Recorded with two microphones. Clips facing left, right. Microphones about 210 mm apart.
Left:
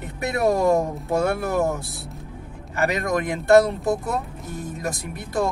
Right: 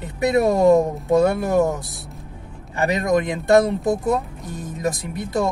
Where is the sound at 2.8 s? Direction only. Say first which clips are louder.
Right 4 dB; 20° right (ahead or behind).